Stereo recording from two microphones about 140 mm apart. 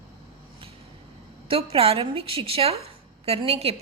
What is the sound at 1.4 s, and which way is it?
A woman's voice, 40° right (ahead or behind).